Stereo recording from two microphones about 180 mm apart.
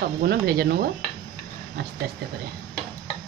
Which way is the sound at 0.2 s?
60° right (ahead or behind).